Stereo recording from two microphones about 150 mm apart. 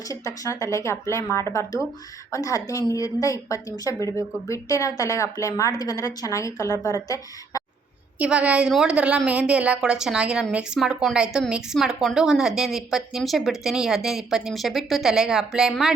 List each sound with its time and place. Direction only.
0.0 s speech: 20° left (ahead or behind)
8.2 s a woman's voice: 10° right (ahead or behind)